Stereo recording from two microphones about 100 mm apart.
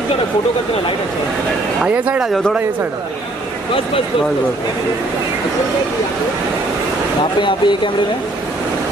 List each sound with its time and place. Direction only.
1.9 s speech: 10° right (ahead or behind)
7.3 s speech: 50° left (ahead or behind)